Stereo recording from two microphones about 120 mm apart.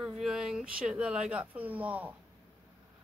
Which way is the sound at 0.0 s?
5° right (ahead or behind).